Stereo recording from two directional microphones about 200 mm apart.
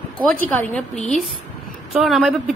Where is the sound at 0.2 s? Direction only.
10° left (ahead or behind).